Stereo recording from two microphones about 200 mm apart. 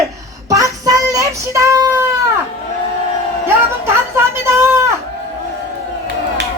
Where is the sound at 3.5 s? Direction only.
10° right (ahead or behind).